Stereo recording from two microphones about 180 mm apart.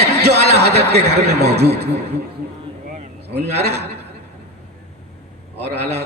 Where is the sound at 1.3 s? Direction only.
65° right (ahead or behind).